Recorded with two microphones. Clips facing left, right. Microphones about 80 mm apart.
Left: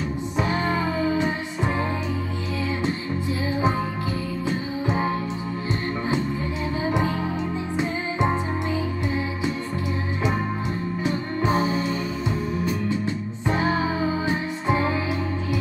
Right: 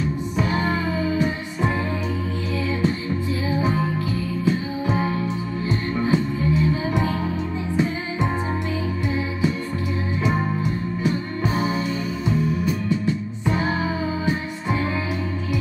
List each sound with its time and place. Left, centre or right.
0.4 s music: left
3.4 s music: left
11.0 s music: left
13.0 s music: left